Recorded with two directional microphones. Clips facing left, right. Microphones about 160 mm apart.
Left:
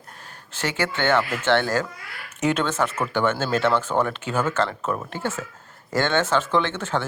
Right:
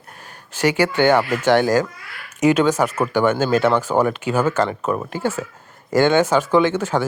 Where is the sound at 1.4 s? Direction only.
10° right (ahead or behind).